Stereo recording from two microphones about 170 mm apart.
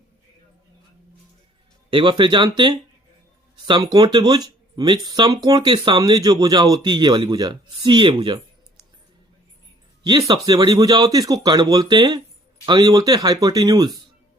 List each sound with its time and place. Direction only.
1.9 s speech: 30° right (ahead or behind)
10.0 s speech: 25° right (ahead or behind)